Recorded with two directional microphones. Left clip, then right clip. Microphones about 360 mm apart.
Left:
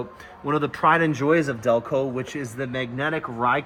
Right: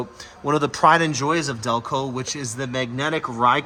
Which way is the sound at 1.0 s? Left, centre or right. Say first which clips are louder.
Left 1 dB; centre.